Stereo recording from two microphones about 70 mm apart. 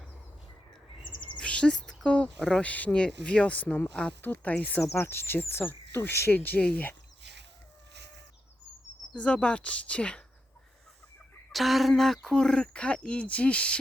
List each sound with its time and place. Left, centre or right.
1.4 s chirp: centre
2.0 s speech: centre
4.8 s speech: left
9.1 s speech: centre
11.5 s speech: centre